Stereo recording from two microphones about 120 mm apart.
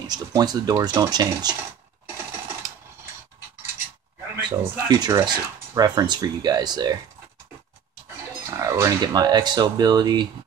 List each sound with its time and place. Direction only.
0.0 s speech: 35° right (ahead or behind)
4.4 s speech: 35° right (ahead or behind)
8.5 s speech: 25° right (ahead or behind)